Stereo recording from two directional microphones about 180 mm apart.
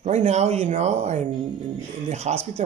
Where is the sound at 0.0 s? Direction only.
40° right (ahead or behind).